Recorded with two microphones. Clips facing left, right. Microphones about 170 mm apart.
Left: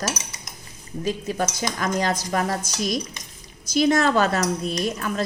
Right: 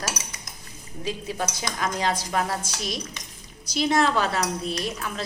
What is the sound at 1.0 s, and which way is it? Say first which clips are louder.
Speech: left 4 dB; 45° left (ahead or behind).